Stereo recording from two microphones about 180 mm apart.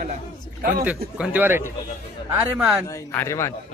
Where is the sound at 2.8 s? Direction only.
15° left (ahead or behind).